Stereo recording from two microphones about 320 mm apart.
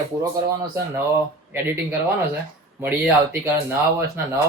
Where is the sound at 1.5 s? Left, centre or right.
Centre.